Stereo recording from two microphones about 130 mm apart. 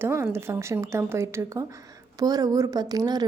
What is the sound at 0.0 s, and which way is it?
A woman's voice, 20° right (ahead or behind).